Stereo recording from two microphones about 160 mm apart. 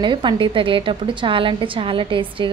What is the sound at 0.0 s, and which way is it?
A woman's voice, 30° right (ahead or behind).